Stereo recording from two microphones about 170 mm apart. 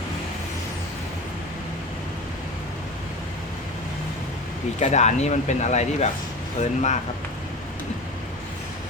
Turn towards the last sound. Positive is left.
turn(degrees=45)  # may be behind; listen again after turning